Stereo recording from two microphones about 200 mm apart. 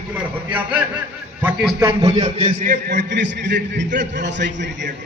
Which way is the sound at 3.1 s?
60° right (ahead or behind).